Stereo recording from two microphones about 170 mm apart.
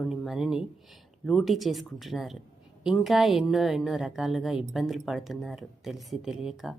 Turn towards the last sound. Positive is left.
turn(degrees=-5)  # may be behind; listen again after turning